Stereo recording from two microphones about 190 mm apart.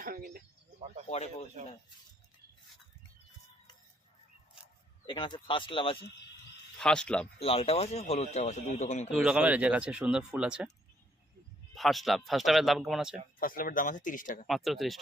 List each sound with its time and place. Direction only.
0.0 s speech: 50° right (ahead or behind)
1.1 s speech: 35° left (ahead or behind)
5.0 s speech: 25° left (ahead or behind)
6.7 s speech: 5° left (ahead or behind)
7.3 s speech: 30° left (ahead or behind)
9.1 s speech: 5° right (ahead or behind)
11.7 s speech: centre (ahead or behind)
13.4 s speech: 50° left (ahead or behind)
14.4 s speech: centre (ahead or behind)